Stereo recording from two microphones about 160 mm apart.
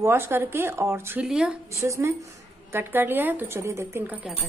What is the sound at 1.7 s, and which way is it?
A woman's voice, 20° right (ahead or behind).